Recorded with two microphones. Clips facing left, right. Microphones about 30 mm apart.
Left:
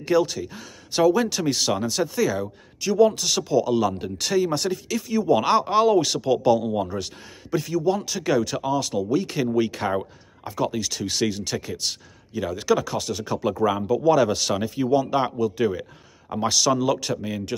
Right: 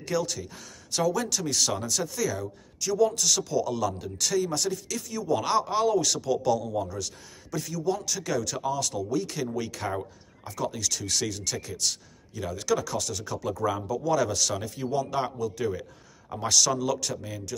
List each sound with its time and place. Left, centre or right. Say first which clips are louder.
0.0 s speech: left 8 dB; left
7.5 s speech: left 7 dB; left